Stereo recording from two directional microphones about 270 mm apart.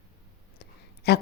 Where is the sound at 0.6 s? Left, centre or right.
Left.